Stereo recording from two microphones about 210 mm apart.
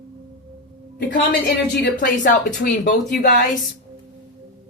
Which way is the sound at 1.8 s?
40° left (ahead or behind).